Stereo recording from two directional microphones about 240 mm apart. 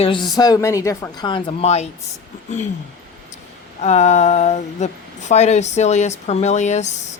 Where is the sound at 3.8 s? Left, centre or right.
Left.